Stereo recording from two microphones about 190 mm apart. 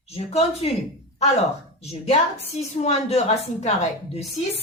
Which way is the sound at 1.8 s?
35° left (ahead or behind).